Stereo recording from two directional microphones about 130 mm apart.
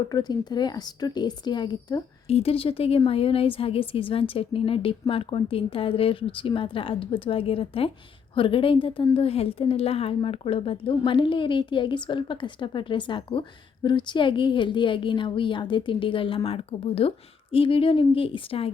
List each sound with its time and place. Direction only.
0.1 s a woman's voice: 30° left (ahead or behind)
2.2 s a woman's voice: 50° left (ahead or behind)